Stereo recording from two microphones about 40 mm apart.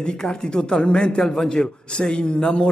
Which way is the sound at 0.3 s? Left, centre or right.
Centre.